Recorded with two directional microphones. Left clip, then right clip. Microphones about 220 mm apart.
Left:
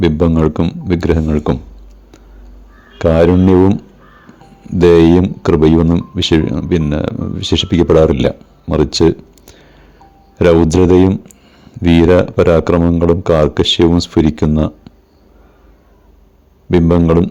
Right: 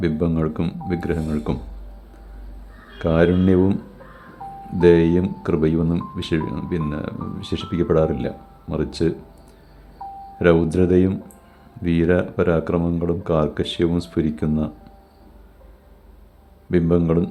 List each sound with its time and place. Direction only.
0.0 s speech: 30° left (ahead or behind)
3.0 s speech: 35° left (ahead or behind)
4.8 s speech: 35° left (ahead or behind)